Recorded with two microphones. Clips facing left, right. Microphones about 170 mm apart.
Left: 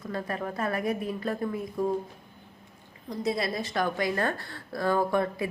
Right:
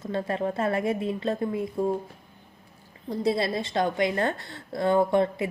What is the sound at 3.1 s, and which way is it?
A woman's voice, 30° right (ahead or behind).